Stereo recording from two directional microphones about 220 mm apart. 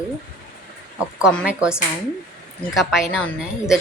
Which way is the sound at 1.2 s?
5° right (ahead or behind).